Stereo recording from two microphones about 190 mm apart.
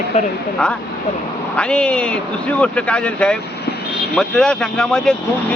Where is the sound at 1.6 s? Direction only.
5° left (ahead or behind).